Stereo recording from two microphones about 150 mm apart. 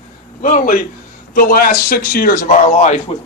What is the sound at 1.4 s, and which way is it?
A man's voice, 75° left (ahead or behind).